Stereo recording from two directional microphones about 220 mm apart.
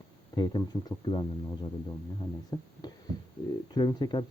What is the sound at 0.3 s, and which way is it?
Speech, 20° left (ahead or behind).